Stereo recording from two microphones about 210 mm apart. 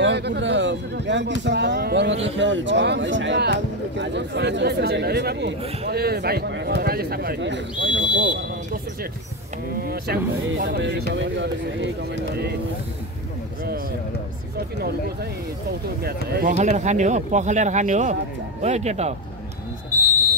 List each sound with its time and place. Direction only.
0.0 s a man's voice: 55° right (ahead or behind)
9.8 s a man's voice: 45° right (ahead or behind)
16.0 s a man's voice: 45° right (ahead or behind)
16.5 s speech: 35° right (ahead or behind)